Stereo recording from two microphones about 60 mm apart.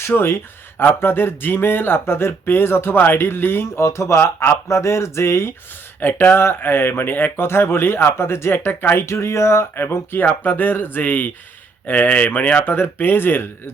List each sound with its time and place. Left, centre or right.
0.1 s speech: left
6.0 s speech: left
9.0 s speech: left
9.8 s speech: left
12.7 s speech: left